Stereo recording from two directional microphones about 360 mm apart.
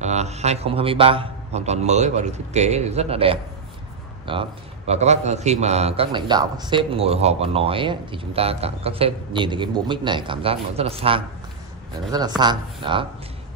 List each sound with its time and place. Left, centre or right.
0.0 s a man's voice: centre